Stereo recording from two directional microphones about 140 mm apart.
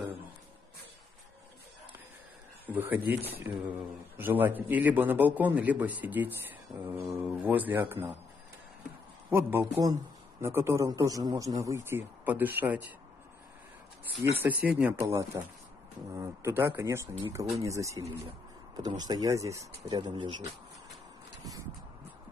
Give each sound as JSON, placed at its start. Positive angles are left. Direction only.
{"t": 2.7, "sound": "speech", "side_deg": -15}
{"t": 9.3, "sound": "speech", "side_deg": -15}
{"t": 14.6, "sound": "speech", "side_deg": -10}